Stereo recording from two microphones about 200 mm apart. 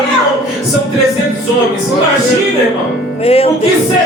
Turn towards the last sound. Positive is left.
turn(degrees=30)  # may be behind; listen again after turning